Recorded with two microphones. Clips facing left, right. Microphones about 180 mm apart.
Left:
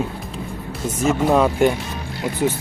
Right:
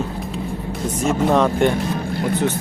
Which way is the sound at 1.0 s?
5° left (ahead or behind).